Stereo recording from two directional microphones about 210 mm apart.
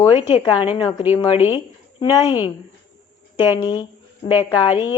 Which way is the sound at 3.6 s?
20° left (ahead or behind).